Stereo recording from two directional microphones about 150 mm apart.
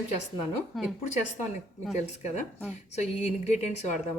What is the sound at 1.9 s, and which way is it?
A woman's voice, 50° left (ahead or behind).